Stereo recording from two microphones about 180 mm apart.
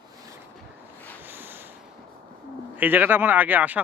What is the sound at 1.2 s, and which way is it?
Snort, 10° right (ahead or behind).